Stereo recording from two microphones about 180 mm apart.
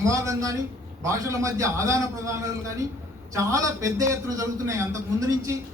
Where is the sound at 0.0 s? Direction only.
15° right (ahead or behind).